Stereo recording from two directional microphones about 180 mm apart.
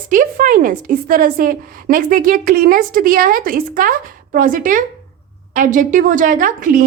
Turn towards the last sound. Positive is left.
turn(degrees=-50)  # may be behind; listen again after turning